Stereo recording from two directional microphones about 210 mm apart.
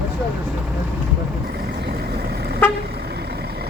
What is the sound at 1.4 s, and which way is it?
Vehicle, 45° right (ahead or behind).